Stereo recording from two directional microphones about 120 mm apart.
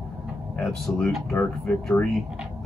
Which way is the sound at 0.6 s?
5° left (ahead or behind).